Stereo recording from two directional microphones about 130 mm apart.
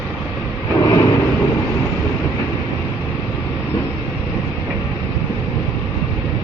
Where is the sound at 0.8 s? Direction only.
25° left (ahead or behind).